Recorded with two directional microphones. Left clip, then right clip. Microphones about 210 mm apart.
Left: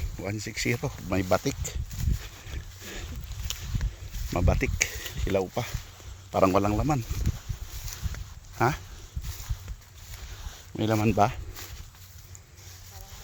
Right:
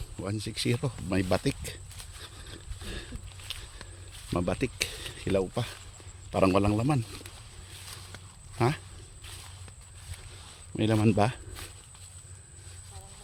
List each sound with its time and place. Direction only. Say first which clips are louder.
0.2 s speech: left 2 dB; 5° right (ahead or behind)
2.5 s a sound: left 1 dB; 5° right (ahead or behind)
3.5 s a sound: left 3 dB; 50° left (ahead or behind)
4.3 s speech: left 2 dB; 5° right (ahead or behind)
8.5 s speech: left 3 dB; 5° right (ahead or behind)
10.8 s speech: left 2 dB; 10° right (ahead or behind)